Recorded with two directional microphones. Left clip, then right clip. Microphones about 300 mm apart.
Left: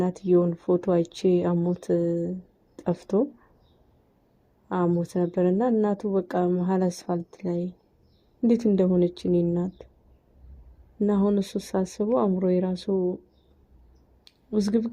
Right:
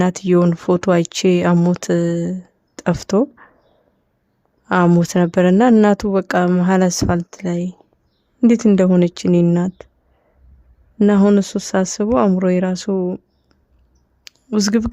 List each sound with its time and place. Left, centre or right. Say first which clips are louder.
0.0 s speech: right 7 dB; right
4.7 s speech: right 11 dB; right
11.0 s speech: right 10 dB; right
12.9 s speech: right 3 dB; right
14.3 s a sound: right 8 dB; right